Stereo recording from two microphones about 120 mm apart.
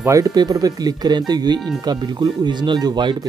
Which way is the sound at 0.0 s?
25° right (ahead or behind).